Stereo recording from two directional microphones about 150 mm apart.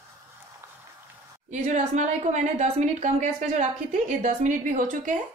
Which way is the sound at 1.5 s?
50° right (ahead or behind).